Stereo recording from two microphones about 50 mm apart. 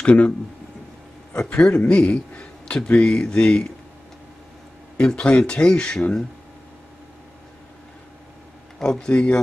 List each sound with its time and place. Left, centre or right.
0.0 s speech: left
1.5 s a man's voice: left
4.9 s a man's voice: left
8.7 s a man's voice: centre